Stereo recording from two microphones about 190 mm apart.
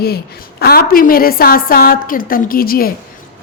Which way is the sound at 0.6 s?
55° left (ahead or behind).